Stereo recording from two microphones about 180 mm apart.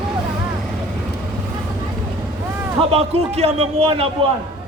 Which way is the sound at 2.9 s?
35° right (ahead or behind).